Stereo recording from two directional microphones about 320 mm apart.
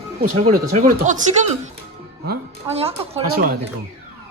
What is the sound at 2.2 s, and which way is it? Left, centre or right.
Speech, right.